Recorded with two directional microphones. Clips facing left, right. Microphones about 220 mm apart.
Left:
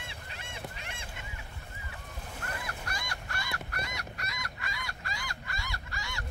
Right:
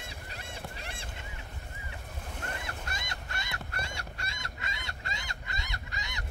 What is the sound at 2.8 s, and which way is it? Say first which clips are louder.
Fowl: left 1 dB; 25° right (ahead or behind).